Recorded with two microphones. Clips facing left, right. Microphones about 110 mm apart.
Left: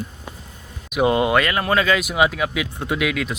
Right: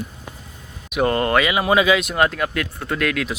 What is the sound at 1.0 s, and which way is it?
Speech, 10° left (ahead or behind).